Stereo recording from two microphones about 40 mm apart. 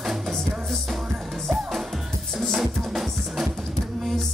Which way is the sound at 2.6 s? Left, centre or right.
Centre.